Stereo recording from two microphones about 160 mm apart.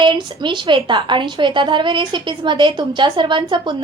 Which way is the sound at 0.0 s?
30° right (ahead or behind).